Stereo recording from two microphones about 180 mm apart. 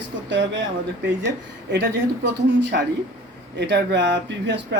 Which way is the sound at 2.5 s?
70° right (ahead or behind).